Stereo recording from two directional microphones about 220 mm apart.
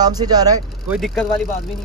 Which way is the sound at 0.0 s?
20° right (ahead or behind).